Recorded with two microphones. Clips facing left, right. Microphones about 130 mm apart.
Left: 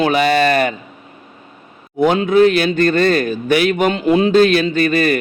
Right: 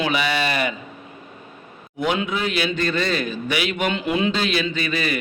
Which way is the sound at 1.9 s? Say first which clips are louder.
Left 11 dB; 45° left (ahead or behind).